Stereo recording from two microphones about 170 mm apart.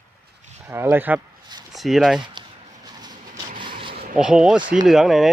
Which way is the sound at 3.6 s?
30° right (ahead or behind).